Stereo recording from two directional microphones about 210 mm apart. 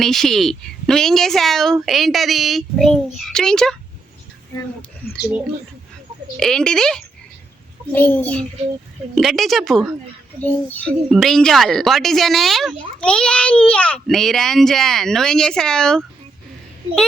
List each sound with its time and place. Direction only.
0.0 s a woman's voice: centre (ahead or behind)
5.0 s speech: 50° left (ahead or behind)
6.3 s a woman's voice: centre (ahead or behind)